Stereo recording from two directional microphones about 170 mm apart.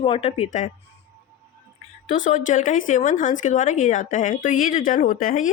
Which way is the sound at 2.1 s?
50° left (ahead or behind).